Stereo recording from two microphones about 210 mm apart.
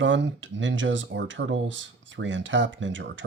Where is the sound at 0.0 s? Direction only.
60° right (ahead or behind).